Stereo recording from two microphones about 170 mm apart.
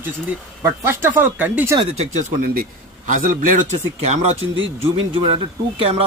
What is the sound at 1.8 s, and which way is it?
Speech, 40° right (ahead or behind).